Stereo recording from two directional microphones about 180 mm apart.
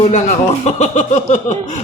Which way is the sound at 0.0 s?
40° left (ahead or behind).